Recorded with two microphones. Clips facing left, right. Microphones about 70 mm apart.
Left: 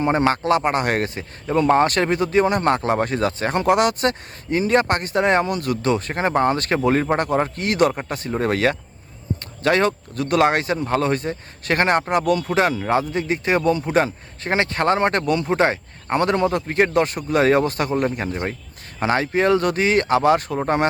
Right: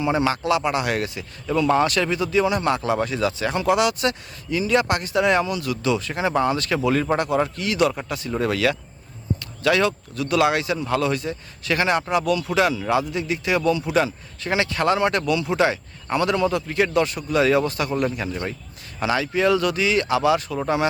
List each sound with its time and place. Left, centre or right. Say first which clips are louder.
0.0 s a man's voice: left 3 dB; left